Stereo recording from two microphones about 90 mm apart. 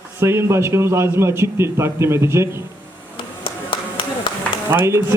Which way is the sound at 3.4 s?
65° left (ahead or behind).